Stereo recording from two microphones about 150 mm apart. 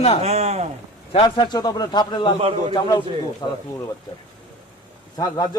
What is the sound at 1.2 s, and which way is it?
A man's voice, 30° left (ahead or behind).